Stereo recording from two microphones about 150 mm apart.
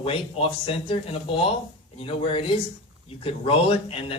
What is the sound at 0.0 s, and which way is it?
A man's voice, 40° left (ahead or behind).